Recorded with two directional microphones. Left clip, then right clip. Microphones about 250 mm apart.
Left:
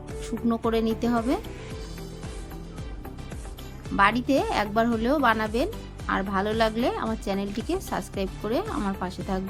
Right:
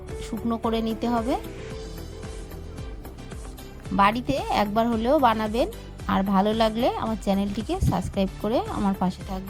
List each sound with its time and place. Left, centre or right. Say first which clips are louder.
0.2 s a woman's voice: left 1 dB; right
3.9 s a woman's voice: even; right